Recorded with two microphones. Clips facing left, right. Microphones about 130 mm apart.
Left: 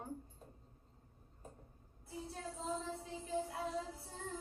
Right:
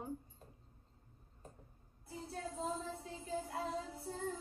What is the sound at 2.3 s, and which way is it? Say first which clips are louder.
Music: right 2 dB; 50° right (ahead or behind).